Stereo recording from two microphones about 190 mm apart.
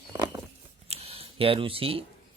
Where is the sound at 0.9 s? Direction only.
30° right (ahead or behind).